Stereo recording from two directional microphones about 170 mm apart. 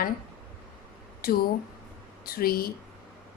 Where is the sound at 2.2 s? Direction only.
60° left (ahead or behind).